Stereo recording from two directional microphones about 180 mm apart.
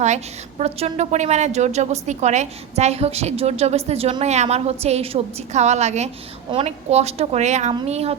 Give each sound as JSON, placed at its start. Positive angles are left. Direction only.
{"t": 0.6, "sound": "a woman's voice", "side_deg": -35}